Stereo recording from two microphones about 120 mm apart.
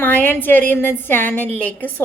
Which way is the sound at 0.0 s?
15° left (ahead or behind).